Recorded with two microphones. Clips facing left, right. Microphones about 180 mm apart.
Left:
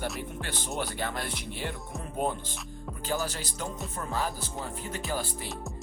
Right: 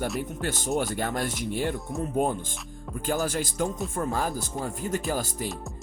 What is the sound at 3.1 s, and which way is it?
Speech, 50° right (ahead or behind).